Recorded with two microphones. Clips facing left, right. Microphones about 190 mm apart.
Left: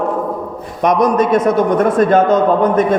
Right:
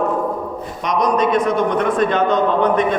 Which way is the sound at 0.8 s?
55° left (ahead or behind).